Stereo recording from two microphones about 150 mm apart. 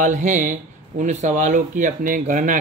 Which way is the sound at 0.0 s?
55° right (ahead or behind).